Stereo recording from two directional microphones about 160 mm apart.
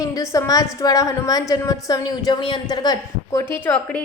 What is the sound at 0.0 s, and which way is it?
A woman's voice, 20° left (ahead or behind).